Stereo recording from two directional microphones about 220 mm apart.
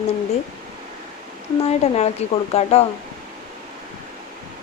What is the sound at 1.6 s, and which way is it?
A woman's voice, 30° left (ahead or behind).